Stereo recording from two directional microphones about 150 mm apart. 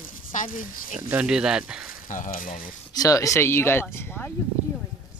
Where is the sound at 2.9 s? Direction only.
25° left (ahead or behind).